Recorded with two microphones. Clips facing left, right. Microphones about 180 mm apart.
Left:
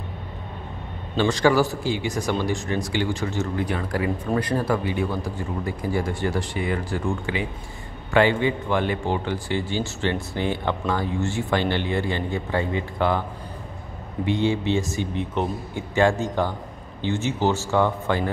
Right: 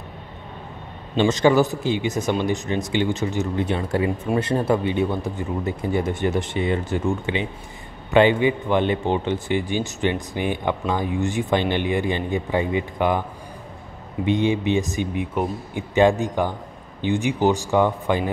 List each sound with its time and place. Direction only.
1.1 s a man's voice: 20° right (ahead or behind)
14.2 s a man's voice: 20° right (ahead or behind)